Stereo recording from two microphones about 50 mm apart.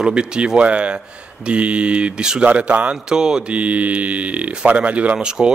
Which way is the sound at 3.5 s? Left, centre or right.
Right.